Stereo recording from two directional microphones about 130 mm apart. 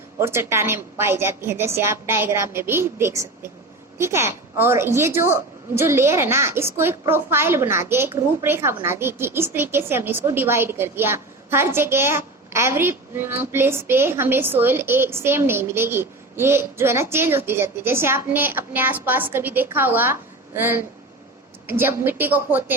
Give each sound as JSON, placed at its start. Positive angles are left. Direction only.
{"t": 0.2, "sound": "a woman's voice", "side_deg": -20}